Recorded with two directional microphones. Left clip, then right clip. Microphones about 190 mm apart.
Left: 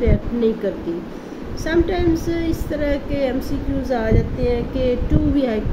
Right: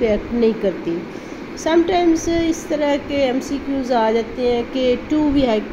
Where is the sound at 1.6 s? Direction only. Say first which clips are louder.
Right 4 dB; 20° right (ahead or behind).